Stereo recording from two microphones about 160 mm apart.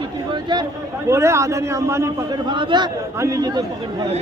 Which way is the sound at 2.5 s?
30° right (ahead or behind).